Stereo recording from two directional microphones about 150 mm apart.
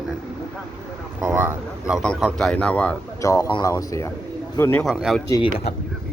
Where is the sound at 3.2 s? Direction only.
25° left (ahead or behind).